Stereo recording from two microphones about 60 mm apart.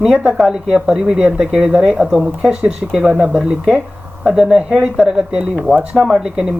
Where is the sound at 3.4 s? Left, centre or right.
Centre.